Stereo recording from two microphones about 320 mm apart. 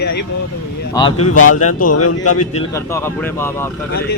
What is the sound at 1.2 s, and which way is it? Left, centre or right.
Speech, left.